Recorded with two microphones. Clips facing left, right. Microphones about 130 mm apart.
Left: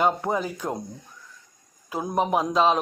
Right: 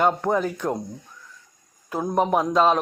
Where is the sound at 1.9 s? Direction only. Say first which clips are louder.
Right 2 dB; 5° left (ahead or behind).